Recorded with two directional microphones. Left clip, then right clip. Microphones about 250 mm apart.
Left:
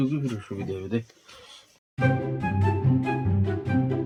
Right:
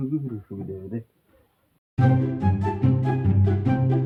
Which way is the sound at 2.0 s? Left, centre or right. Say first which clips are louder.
Right 1 dB; centre.